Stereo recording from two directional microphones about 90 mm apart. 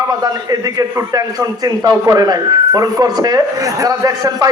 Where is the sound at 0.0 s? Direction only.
45° right (ahead or behind).